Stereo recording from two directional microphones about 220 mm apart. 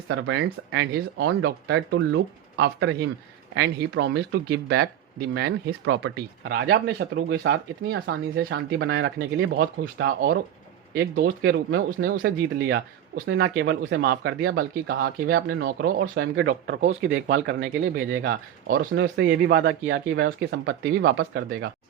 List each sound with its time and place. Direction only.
0.1 s speech: 55° right (ahead or behind)
16.5 s speech: 50° right (ahead or behind)